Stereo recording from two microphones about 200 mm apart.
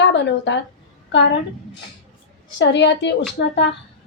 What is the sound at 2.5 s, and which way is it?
Speech, 60° left (ahead or behind).